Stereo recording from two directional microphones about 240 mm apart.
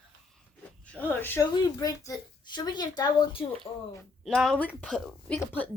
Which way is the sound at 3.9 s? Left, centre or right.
Centre.